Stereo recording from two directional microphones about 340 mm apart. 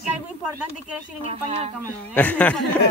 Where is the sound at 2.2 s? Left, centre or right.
Centre.